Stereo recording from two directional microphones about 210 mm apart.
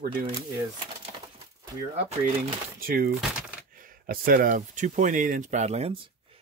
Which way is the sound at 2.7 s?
40° right (ahead or behind).